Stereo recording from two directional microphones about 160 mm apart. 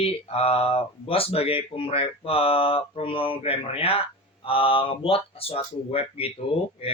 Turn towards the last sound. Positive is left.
turn(degrees=35)  # may be behind; listen again after turning